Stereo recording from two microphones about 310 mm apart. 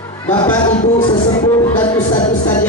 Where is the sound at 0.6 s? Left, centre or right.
Centre.